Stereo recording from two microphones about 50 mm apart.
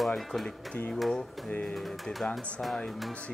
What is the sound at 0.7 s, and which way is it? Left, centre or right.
Speech, left.